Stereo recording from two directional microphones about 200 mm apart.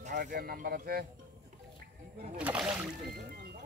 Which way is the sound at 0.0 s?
40° right (ahead or behind).